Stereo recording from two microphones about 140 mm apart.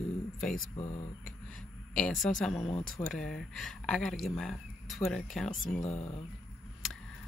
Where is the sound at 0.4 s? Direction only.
5° left (ahead or behind).